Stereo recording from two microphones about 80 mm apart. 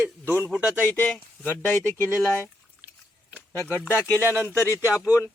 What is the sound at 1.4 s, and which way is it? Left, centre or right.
Speech, left.